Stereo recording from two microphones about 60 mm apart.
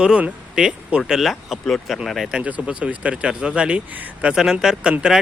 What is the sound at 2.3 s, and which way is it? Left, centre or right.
Speech, centre.